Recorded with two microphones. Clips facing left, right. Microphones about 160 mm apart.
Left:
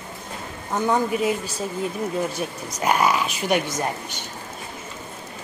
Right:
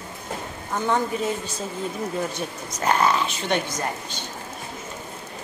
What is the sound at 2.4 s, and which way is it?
Speech, 10° left (ahead or behind).